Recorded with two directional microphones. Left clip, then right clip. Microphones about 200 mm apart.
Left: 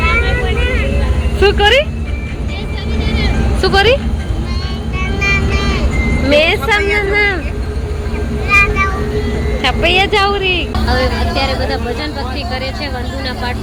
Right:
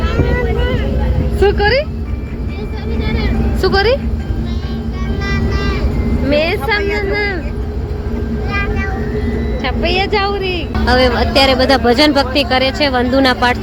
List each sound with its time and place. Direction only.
1.4 s speech: 5° right (ahead or behind)
3.6 s speech: 10° right (ahead or behind)
6.2 s speech: 5° right (ahead or behind)
9.6 s speech: centre (ahead or behind)
10.8 s speech: 40° right (ahead or behind)